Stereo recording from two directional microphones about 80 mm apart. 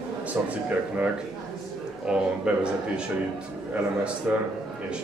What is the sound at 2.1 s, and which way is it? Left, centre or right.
Speech, centre.